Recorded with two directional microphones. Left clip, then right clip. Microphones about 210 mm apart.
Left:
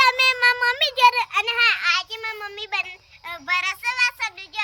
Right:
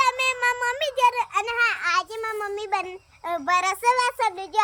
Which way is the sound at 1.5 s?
20° right (ahead or behind).